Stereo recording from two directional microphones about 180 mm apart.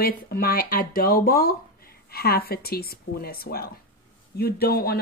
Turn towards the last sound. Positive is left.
turn(degrees=60)  # may be behind; listen again after turning